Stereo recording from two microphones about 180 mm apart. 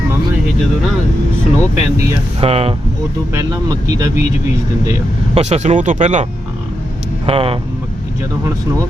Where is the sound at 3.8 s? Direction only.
20° right (ahead or behind).